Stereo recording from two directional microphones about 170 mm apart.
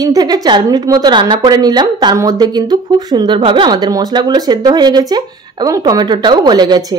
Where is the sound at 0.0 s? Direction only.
20° right (ahead or behind).